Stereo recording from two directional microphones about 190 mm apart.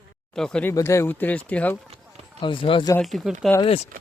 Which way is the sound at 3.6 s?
30° left (ahead or behind).